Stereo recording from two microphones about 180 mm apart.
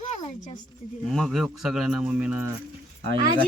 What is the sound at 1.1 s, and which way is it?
Speech, centre (ahead or behind).